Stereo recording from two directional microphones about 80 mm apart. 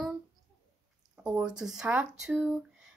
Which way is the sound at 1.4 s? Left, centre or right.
Centre.